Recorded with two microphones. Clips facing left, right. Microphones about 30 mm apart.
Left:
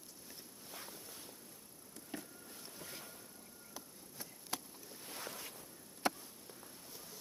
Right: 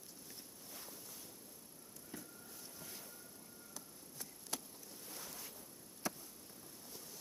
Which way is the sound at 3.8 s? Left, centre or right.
Centre.